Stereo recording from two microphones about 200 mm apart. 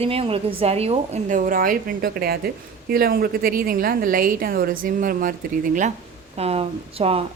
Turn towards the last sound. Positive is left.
turn(degrees=-30)  # may be behind; listen again after turning